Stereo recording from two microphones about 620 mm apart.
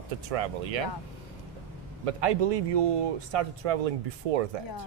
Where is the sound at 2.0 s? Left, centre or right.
Right.